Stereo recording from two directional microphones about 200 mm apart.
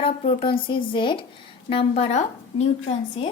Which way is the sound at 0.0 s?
30° left (ahead or behind).